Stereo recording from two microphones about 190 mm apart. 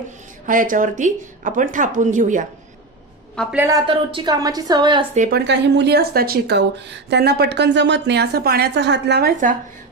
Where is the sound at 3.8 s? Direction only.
25° right (ahead or behind).